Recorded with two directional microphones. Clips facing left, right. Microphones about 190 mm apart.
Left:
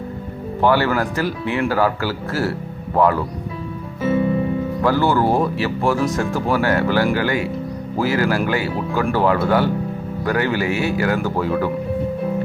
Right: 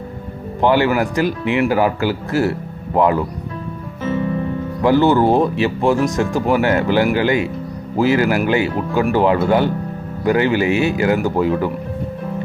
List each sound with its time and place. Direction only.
0.6 s speech: 15° right (ahead or behind)
4.0 s music: 10° left (ahead or behind)
4.8 s speech: 20° right (ahead or behind)